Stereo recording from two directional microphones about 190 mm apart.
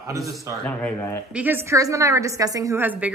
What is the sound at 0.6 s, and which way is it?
Speech, 10° left (ahead or behind).